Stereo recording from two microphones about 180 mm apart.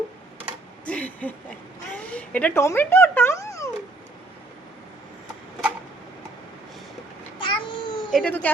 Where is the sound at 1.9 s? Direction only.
10° left (ahead or behind).